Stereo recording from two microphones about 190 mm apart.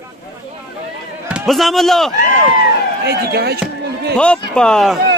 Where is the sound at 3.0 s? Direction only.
60° right (ahead or behind).